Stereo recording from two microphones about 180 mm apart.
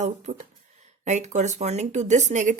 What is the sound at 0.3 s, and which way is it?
Speech, 40° right (ahead or behind).